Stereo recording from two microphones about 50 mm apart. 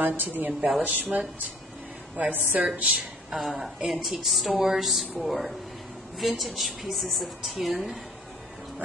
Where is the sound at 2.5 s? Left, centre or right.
Right.